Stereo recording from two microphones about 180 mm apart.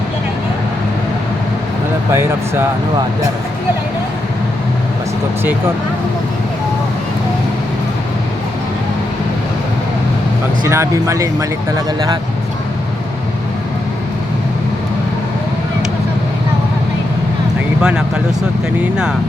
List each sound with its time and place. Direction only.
10.7 s speech: 15° right (ahead or behind)